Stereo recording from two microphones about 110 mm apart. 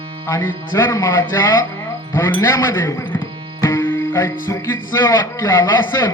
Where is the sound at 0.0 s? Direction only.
55° right (ahead or behind).